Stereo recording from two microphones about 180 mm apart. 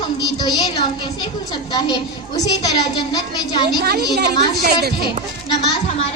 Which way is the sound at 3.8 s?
65° right (ahead or behind).